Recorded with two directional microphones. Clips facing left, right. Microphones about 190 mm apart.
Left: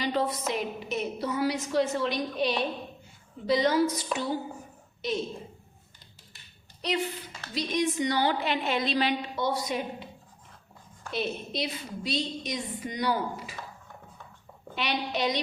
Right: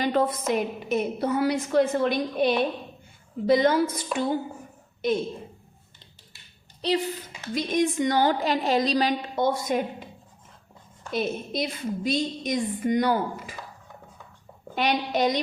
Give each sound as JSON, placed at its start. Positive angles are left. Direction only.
{"t": 0.0, "sound": "a woman's voice", "side_deg": -50}
{"t": 6.8, "sound": "a woman's voice", "side_deg": -30}
{"t": 7.5, "sound": "a woman's voice", "side_deg": -50}
{"t": 11.1, "sound": "a woman's voice", "side_deg": -45}
{"t": 14.8, "sound": "a woman's voice", "side_deg": -45}